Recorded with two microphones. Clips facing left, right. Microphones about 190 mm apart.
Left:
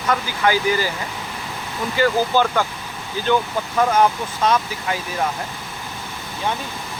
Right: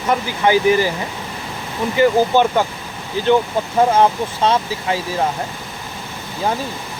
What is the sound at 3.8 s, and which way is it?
Speech, 25° right (ahead or behind).